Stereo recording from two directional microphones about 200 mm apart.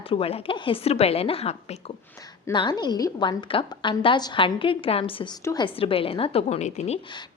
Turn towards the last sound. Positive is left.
turn(degrees=35)  # may be behind; listen again after turning